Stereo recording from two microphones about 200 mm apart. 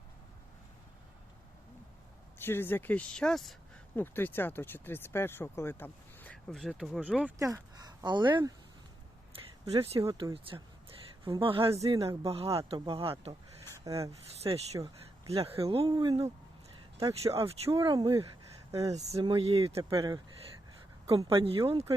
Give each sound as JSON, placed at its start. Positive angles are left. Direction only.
{"t": 2.4, "sound": "speech", "side_deg": 10}
{"t": 9.3, "sound": "a sound", "side_deg": -30}
{"t": 10.0, "sound": "speech", "side_deg": -15}
{"t": 11.3, "sound": "speech", "side_deg": -25}
{"t": 13.8, "sound": "speech", "side_deg": -15}
{"t": 14.1, "sound": "speech", "side_deg": -30}
{"t": 17.3, "sound": "speech", "side_deg": -30}
{"t": 19.2, "sound": "speech", "side_deg": -25}
{"t": 19.9, "sound": "speech", "side_deg": -20}